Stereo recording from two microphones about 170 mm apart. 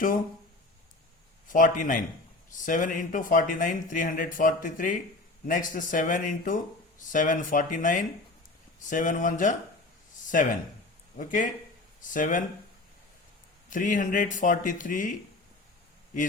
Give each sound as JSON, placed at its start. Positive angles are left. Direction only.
{"t": 1.5, "sound": "speech", "side_deg": 50}
{"t": 13.7, "sound": "speech", "side_deg": 50}